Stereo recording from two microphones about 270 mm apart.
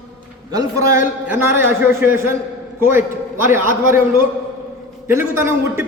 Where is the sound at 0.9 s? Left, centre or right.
Centre.